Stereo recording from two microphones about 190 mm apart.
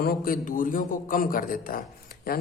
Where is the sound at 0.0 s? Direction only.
50° left (ahead or behind).